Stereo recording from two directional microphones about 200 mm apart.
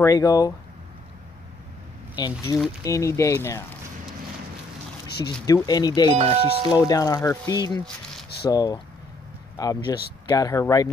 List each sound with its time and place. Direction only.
0.0 s speech: 15° left (ahead or behind)
2.1 s speech: 20° left (ahead or behind)
5.4 s speech: 15° left (ahead or behind)
6.1 s speech: 30° right (ahead or behind)
6.8 s speech: 15° left (ahead or behind)